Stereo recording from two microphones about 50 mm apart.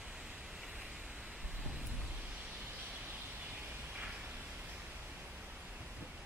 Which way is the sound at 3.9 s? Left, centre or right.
Right.